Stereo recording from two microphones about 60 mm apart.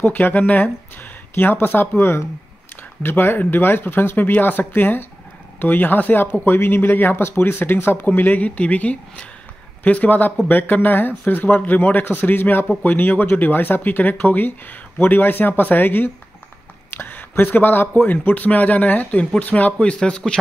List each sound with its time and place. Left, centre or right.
0.1 s speech: left; by 20.3 s centre